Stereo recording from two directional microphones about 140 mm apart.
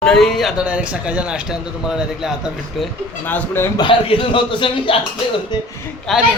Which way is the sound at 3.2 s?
15° left (ahead or behind).